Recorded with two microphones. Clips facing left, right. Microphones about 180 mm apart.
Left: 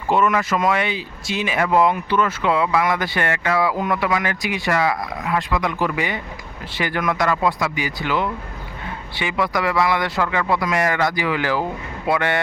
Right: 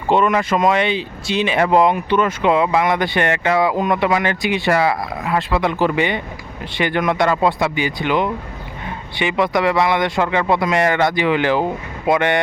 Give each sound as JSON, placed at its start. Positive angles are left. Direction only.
{"t": 0.1, "sound": "speech", "side_deg": -25}